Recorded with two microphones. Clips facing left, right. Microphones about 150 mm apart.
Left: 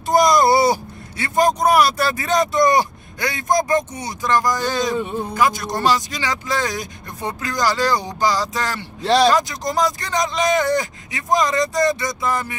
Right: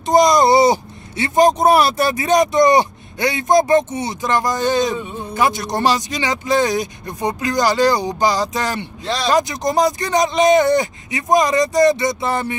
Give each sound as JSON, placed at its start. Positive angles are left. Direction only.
{"t": 0.0, "sound": "speech", "side_deg": -20}